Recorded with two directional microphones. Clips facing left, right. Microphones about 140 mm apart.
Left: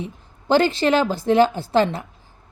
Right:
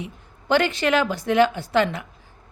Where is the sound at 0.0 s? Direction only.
35° left (ahead or behind).